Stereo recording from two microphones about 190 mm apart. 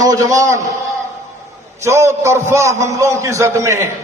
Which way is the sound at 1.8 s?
15° right (ahead or behind).